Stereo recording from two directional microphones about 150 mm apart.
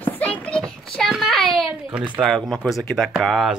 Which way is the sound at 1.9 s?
10° right (ahead or behind).